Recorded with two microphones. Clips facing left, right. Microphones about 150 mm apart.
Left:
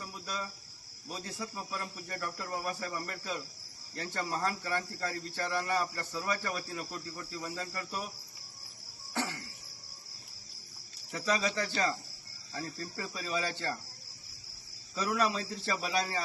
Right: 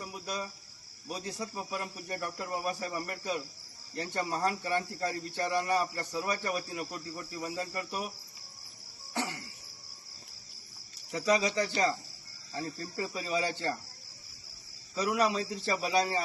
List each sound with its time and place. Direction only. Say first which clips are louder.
0.0 s cricket: right 2 dB; 20° right (ahead or behind)
9.1 s cricket: right 1 dB; 15° right (ahead or behind)
11.1 s cricket: right 4 dB; 20° right (ahead or behind)
14.9 s cricket: right 2 dB; 20° right (ahead or behind)